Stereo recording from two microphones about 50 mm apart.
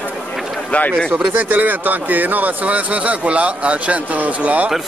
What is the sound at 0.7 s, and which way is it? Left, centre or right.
Speech, left.